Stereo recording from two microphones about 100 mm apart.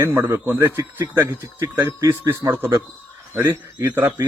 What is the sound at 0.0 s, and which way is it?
Speech, 25° right (ahead or behind).